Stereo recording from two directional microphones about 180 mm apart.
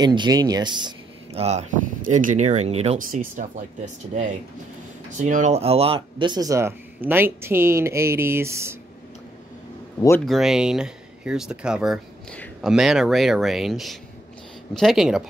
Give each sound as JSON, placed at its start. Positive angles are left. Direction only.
{"t": 0.0, "sound": "speech", "side_deg": -25}
{"t": 5.1, "sound": "speech", "side_deg": -45}
{"t": 10.2, "sound": "speech", "side_deg": 0}